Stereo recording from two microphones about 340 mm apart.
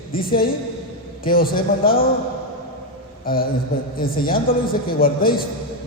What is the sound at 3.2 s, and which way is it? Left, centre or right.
A man's voice, left.